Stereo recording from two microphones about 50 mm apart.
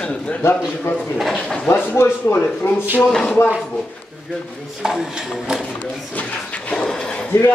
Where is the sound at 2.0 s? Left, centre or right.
Left.